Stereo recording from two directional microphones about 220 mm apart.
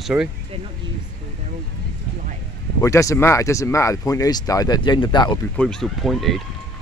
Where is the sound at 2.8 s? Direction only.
15° left (ahead or behind).